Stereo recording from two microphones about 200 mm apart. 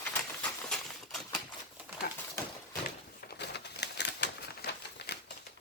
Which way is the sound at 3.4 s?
55° left (ahead or behind).